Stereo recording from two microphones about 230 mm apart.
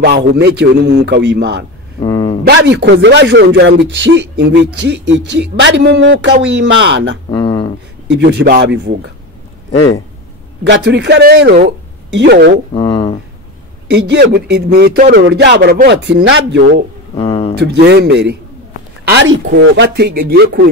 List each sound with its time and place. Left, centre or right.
0.0 s a man's voice: right
2.0 s a sound: centre
2.4 s a man's voice: right
7.2 s a sound: centre
8.1 s a man's voice: right
10.9 s a man's voice: right
12.7 s speech: left
13.8 s a man's voice: right
17.2 s speech: left
17.6 s a man's voice: right